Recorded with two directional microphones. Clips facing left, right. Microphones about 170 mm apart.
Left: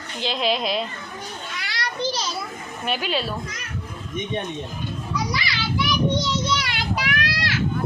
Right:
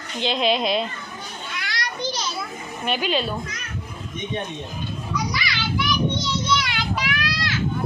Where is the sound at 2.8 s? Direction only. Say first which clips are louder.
Right 2 dB; 5° left (ahead or behind).